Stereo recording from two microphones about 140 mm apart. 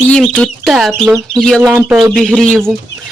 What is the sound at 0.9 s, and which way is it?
Speech, 15° right (ahead or behind).